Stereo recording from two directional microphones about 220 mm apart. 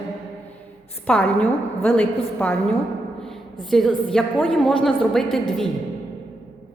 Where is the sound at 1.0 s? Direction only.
5° left (ahead or behind).